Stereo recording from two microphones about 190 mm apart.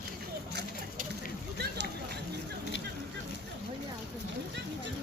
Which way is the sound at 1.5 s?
60° right (ahead or behind).